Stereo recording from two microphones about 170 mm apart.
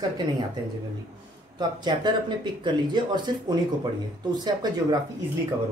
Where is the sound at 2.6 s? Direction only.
25° right (ahead or behind).